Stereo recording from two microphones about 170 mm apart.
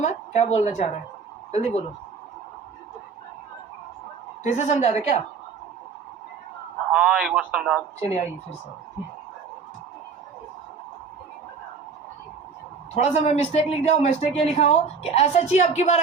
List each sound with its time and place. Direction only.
0.0 s a man's voice: 40° left (ahead or behind)
4.4 s a man's voice: 40° left (ahead or behind)
6.9 s speech: 5° right (ahead or behind)
7.9 s a man's voice: 40° left (ahead or behind)
12.9 s a man's voice: 40° left (ahead or behind)